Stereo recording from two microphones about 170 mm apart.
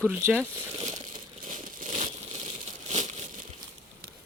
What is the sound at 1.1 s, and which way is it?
Crumpling, 50° right (ahead or behind).